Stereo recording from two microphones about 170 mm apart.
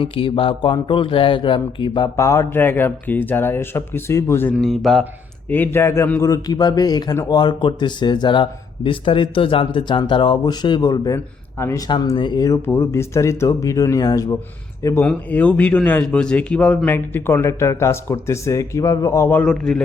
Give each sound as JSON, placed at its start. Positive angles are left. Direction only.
{"t": 0.0, "sound": "a man's voice", "side_deg": 30}
{"t": 2.1, "sound": "speech", "side_deg": 15}
{"t": 4.6, "sound": "speech", "side_deg": 0}
{"t": 5.5, "sound": "a man's voice", "side_deg": 10}
{"t": 15.0, "sound": "speech", "side_deg": 10}